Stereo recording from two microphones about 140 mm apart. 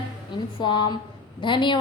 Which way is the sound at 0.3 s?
35° left (ahead or behind).